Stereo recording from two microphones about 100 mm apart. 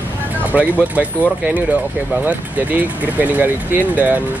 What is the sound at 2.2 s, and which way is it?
Speech, 15° right (ahead or behind).